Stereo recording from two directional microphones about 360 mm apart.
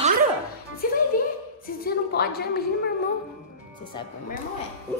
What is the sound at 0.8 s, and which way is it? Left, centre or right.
A woman's voice, left.